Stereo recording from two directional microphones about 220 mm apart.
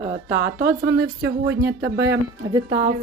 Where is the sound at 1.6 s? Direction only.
60° right (ahead or behind).